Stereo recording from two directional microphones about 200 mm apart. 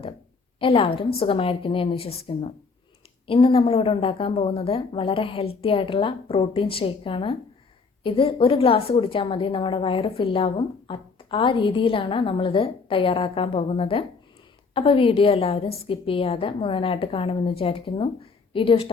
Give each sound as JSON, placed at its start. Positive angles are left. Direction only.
{"t": 0.6, "sound": "a woman's voice", "side_deg": 25}